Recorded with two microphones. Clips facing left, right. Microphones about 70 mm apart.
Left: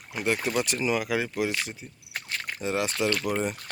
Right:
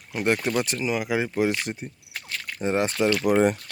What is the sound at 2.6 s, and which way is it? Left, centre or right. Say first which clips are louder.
Speech: right 5 dB; right.